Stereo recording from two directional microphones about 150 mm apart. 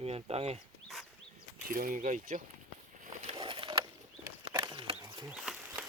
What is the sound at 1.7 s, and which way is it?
Speech, 65° right (ahead or behind).